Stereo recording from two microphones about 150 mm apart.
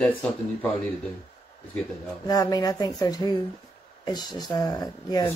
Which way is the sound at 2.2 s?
25° left (ahead or behind).